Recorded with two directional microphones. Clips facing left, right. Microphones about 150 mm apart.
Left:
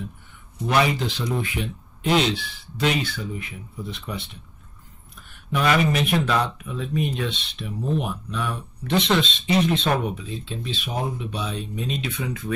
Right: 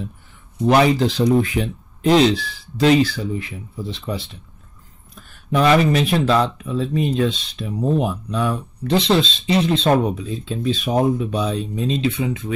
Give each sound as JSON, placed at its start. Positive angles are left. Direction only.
{"t": 0.7, "sound": "speech", "side_deg": -35}